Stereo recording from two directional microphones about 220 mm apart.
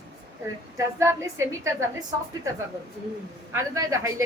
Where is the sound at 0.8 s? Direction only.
10° right (ahead or behind).